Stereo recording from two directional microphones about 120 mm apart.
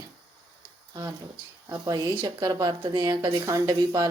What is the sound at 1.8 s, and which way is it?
Speech, 30° right (ahead or behind).